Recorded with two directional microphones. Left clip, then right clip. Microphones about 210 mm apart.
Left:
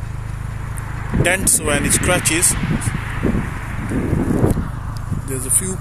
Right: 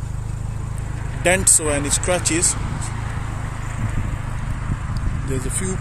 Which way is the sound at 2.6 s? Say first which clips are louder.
Left 6 dB; 60° right (ahead or behind).